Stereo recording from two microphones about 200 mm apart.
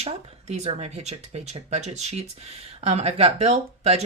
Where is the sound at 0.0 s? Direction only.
35° right (ahead or behind).